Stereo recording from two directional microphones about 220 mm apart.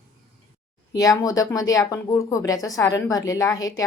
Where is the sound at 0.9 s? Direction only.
15° left (ahead or behind).